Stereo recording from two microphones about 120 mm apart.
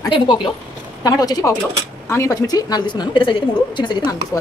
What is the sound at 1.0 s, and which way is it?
Speech, 30° left (ahead or behind).